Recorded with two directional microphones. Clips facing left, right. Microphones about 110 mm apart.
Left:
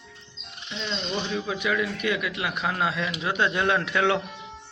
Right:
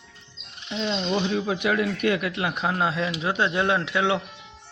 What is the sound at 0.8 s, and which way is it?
Speech, 40° right (ahead or behind).